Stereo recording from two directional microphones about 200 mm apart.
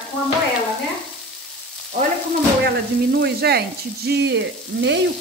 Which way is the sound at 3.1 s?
55° right (ahead or behind).